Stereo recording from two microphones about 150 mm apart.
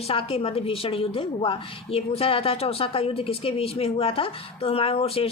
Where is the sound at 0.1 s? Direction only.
40° left (ahead or behind).